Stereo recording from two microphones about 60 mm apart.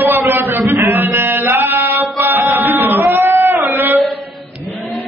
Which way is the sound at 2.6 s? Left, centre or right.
Right.